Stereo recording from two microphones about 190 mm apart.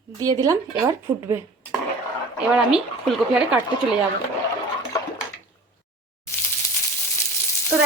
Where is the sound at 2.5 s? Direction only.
5° right (ahead or behind).